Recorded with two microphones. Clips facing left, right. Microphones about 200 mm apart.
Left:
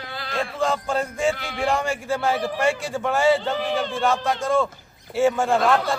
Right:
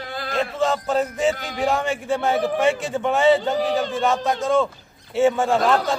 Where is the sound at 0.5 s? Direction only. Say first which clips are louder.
Right 2 dB; centre (ahead or behind).